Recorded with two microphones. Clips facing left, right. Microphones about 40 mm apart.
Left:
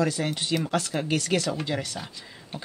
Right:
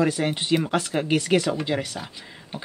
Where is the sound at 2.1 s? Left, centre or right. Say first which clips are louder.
Right 2 dB; centre.